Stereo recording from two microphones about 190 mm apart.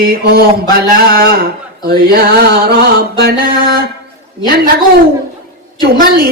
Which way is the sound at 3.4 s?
55° right (ahead or behind).